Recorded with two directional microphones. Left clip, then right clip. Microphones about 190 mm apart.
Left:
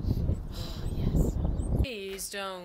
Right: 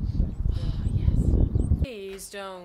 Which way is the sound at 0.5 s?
10° right (ahead or behind).